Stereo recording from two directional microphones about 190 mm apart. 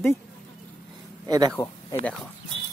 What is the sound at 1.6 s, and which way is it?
Speech, 20° left (ahead or behind).